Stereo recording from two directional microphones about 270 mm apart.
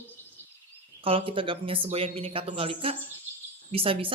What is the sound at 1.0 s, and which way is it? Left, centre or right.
Speech, centre.